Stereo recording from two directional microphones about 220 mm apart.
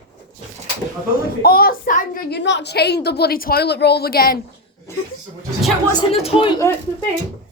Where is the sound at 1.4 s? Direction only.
45° left (ahead or behind).